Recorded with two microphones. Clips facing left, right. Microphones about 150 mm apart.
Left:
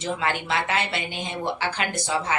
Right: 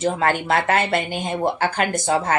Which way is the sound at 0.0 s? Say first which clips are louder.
Right 6 dB; 45° right (ahead or behind).